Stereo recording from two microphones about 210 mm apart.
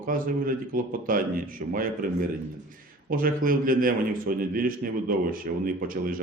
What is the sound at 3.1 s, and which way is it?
A man's voice, 40° right (ahead or behind).